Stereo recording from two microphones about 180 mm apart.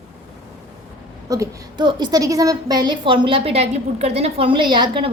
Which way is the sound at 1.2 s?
20° right (ahead or behind).